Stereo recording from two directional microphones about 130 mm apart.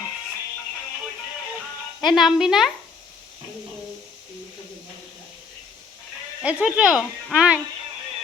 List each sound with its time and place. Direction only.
2.0 s speech: centre (ahead or behind)
6.4 s speech: 10° right (ahead or behind)